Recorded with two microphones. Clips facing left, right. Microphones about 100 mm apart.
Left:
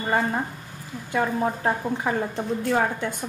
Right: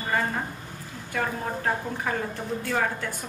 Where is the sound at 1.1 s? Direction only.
20° left (ahead or behind).